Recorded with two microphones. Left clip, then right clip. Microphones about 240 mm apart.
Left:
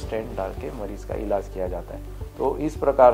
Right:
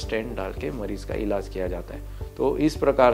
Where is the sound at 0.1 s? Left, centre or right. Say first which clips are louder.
Left 1 dB; right.